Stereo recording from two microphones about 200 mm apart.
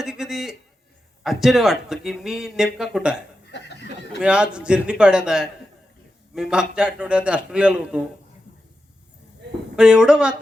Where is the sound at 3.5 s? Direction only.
60° left (ahead or behind).